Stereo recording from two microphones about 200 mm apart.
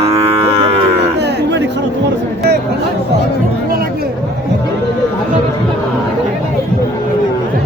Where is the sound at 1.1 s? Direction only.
60° right (ahead or behind).